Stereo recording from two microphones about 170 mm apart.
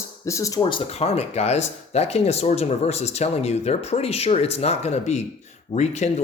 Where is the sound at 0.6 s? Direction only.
30° left (ahead or behind).